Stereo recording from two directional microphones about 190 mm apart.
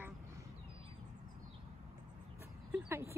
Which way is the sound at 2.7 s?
10° right (ahead or behind).